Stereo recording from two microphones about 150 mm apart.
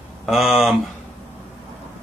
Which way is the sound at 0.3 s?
Centre (ahead or behind).